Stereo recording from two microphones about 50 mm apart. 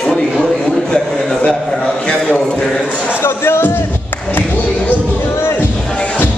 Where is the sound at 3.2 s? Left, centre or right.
Left.